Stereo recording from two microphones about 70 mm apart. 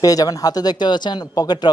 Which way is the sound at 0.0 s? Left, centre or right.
Left.